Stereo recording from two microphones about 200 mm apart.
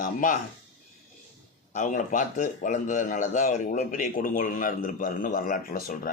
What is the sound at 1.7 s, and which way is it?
A man's voice, 40° left (ahead or behind).